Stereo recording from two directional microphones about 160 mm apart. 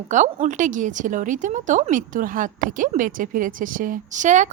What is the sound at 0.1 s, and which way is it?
A woman's voice, 50° right (ahead or behind).